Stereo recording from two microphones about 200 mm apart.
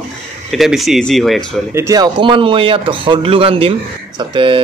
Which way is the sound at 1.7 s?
15° right (ahead or behind).